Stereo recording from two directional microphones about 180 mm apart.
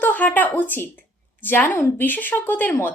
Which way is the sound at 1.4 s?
10° left (ahead or behind).